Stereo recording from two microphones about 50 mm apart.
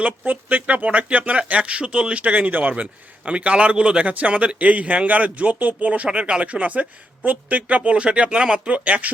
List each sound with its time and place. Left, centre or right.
0.0 s a woman's voice: right